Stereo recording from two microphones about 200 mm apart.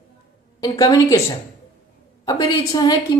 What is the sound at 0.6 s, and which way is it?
Speech, 15° left (ahead or behind).